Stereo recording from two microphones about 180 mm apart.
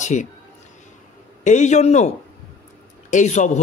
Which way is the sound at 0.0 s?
40° left (ahead or behind).